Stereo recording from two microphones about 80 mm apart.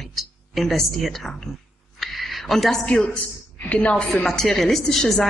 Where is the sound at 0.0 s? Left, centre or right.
Centre.